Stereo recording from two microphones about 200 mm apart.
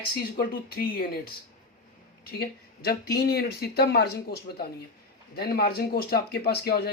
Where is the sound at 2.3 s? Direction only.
50° left (ahead or behind).